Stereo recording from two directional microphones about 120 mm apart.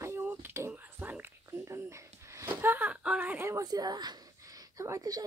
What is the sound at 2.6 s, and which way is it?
Speech, 15° right (ahead or behind).